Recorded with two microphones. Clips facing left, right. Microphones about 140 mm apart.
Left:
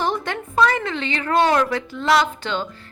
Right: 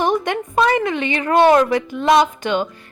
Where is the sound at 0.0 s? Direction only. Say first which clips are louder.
Right 5 dB; 15° right (ahead or behind).